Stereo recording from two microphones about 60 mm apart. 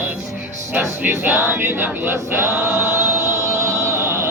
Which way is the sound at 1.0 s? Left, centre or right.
Right.